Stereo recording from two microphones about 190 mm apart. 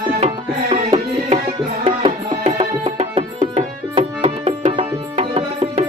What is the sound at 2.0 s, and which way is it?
Music, 35° right (ahead or behind).